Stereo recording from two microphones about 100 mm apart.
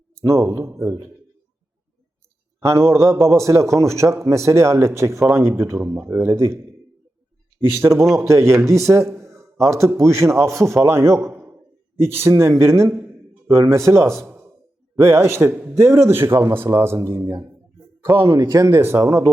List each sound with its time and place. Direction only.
0.3 s speech: 25° right (ahead or behind)
2.6 s speech: 30° right (ahead or behind)
7.8 s a man's voice: 25° right (ahead or behind)